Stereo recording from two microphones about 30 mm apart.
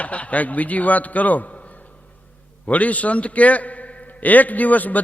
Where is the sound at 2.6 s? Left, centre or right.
Left.